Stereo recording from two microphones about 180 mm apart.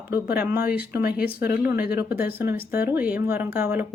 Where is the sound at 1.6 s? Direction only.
10° right (ahead or behind).